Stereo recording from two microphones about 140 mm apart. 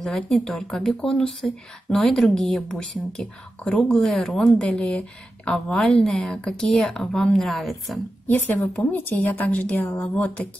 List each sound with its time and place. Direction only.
0.0 s speech: 5° left (ahead or behind)
8.3 s a woman's voice: 15° left (ahead or behind)